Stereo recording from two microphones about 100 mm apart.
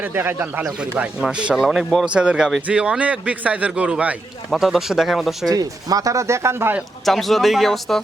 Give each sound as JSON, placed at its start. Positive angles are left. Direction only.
{"t": 0.0, "sound": "a man's voice", "side_deg": -20}
{"t": 2.0, "sound": "a man's voice", "side_deg": -10}
{"t": 4.5, "sound": "speech", "side_deg": 0}
{"t": 5.5, "sound": "speech", "side_deg": -40}
{"t": 7.0, "sound": "speech", "side_deg": 0}